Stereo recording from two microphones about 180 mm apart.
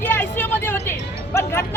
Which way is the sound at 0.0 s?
10° left (ahead or behind).